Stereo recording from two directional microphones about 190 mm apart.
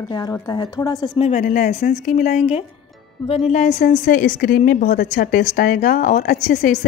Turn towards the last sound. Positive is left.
turn(degrees=40)  # may be behind; listen again after turning